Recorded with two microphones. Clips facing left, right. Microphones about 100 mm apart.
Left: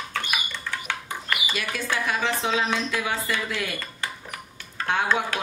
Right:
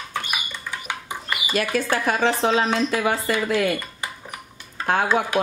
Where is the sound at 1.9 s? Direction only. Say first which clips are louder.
Right 3 dB; 45° right (ahead or behind).